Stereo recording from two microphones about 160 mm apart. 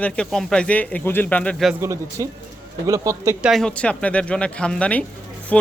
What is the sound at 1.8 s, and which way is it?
Speech, 20° right (ahead or behind).